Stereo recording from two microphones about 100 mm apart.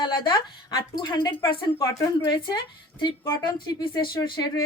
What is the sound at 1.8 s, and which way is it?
Speech, 30° left (ahead or behind).